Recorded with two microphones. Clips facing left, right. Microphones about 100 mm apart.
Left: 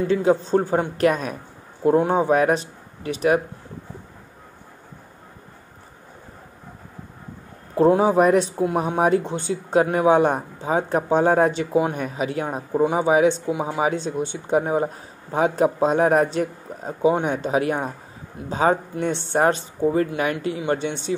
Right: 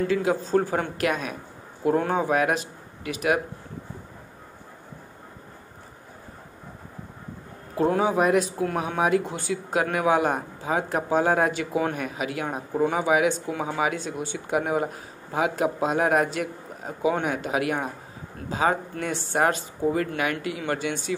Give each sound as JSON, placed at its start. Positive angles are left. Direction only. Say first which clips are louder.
{"t": 0.1, "sound": "speech", "louder": "left 7 dB", "side_deg": 30}
{"t": 0.9, "sound": "speech", "louder": "left 6 dB", "side_deg": 35}
{"t": 2.0, "sound": "speech", "louder": "left 5 dB", "side_deg": 25}
{"t": 7.7, "sound": "speech", "louder": "left 6 dB", "side_deg": 30}
{"t": 13.5, "sound": "speech", "louder": "left 4 dB", "side_deg": 20}
{"t": 13.7, "sound": "speech", "louder": "left 4 dB", "side_deg": 30}